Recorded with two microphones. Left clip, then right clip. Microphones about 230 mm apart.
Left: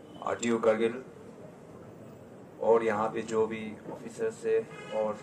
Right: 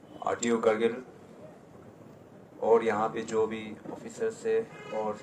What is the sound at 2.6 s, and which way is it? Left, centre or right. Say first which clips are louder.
Speech: right 1 dB; right.